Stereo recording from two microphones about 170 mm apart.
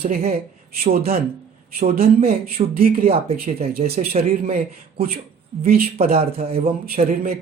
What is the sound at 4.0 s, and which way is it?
Speech, 60° right (ahead or behind).